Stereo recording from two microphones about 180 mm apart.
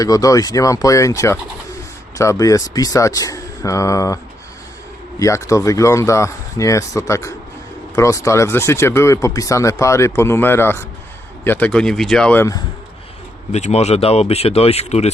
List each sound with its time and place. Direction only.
0.0 s speech: 20° left (ahead or behind)
5.2 s speech: 15° left (ahead or behind)
13.5 s speech: 40° left (ahead or behind)